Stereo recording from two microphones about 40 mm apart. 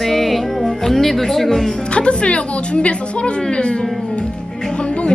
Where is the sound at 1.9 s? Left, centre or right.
Left.